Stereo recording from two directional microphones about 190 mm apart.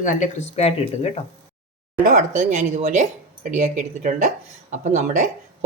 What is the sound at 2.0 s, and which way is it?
Speech, 40° right (ahead or behind).